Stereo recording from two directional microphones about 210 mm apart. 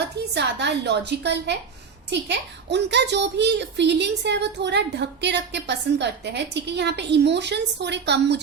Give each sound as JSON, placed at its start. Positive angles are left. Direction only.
{"t": 0.3, "sound": "a child's voice", "side_deg": -55}